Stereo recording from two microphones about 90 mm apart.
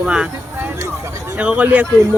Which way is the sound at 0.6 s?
30° right (ahead or behind).